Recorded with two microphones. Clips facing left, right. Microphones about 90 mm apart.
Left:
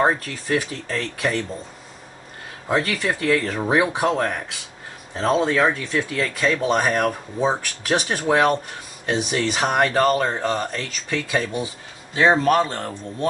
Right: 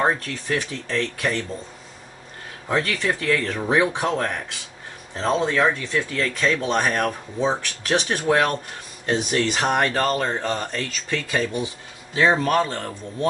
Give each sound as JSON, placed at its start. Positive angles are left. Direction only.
{"t": 0.0, "sound": "speech", "side_deg": 10}
{"t": 2.7, "sound": "speech", "side_deg": 5}